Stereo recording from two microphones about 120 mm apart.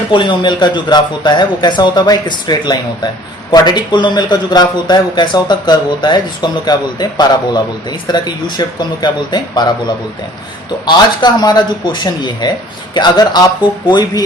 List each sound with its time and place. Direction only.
0.1 s a man's voice: 40° left (ahead or behind)